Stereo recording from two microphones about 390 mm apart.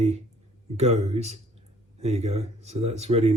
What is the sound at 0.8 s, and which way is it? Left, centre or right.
Speech, centre.